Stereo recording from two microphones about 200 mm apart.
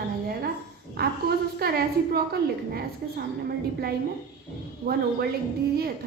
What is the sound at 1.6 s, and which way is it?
A woman's voice, 50° right (ahead or behind).